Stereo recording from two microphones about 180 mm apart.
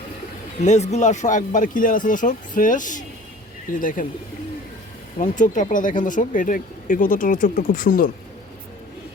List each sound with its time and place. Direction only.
0.6 s speech: 40° left (ahead or behind)
5.2 s speech: 45° left (ahead or behind)